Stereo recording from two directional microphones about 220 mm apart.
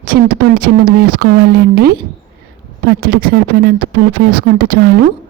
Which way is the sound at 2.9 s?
45° right (ahead or behind).